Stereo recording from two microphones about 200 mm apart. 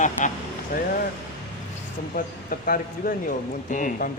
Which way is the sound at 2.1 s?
45° left (ahead or behind).